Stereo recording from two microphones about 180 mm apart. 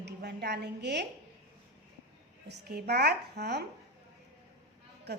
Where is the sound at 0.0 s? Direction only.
65° right (ahead or behind).